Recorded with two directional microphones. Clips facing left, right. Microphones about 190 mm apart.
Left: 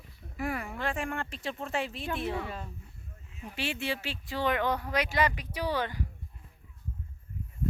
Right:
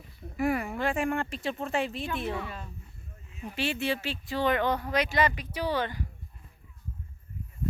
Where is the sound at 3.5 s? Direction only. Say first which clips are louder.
Right 4 dB; 10° left (ahead or behind).